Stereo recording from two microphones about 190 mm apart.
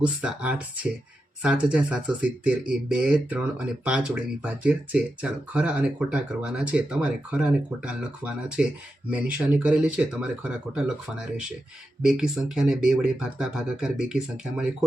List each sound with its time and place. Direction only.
0.0 s speech: 5° right (ahead or behind)